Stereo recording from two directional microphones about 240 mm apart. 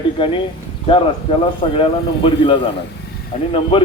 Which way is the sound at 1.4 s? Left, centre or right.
Left.